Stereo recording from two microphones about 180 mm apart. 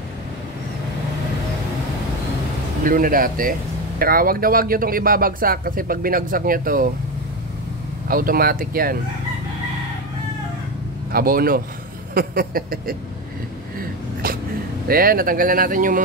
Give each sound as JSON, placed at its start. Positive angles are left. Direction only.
{"t": 2.8, "sound": "speech", "side_deg": -50}
{"t": 8.1, "sound": "speech", "side_deg": -55}
{"t": 11.1, "sound": "speech", "side_deg": -55}
{"t": 12.1, "sound": "a sound", "side_deg": -55}
{"t": 14.9, "sound": "speech", "side_deg": -55}